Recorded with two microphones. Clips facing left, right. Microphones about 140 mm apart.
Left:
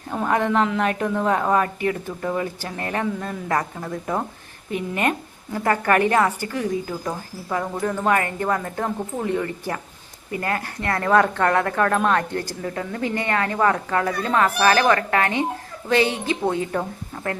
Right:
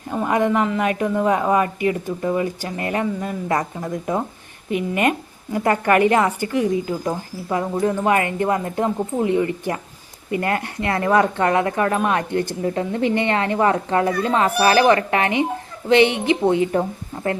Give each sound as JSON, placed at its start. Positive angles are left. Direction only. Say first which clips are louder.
{"t": 0.3, "sound": "a man's voice", "louder": "right 1 dB", "side_deg": -10}